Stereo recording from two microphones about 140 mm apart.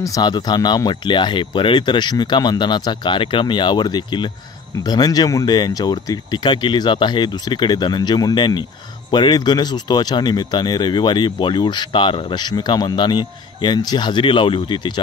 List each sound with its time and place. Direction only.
0.0 s speech: 25° left (ahead or behind)